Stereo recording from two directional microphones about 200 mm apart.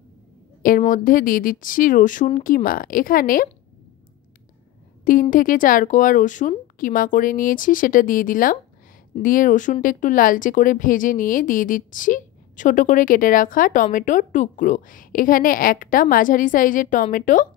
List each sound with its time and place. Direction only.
0.6 s speech: 45° left (ahead or behind)
5.0 s speech: 40° left (ahead or behind)